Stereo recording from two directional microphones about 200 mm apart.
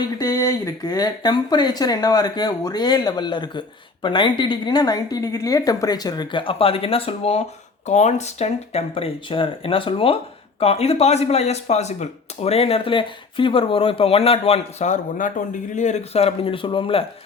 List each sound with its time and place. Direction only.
0.2 s speech: 15° left (ahead or behind)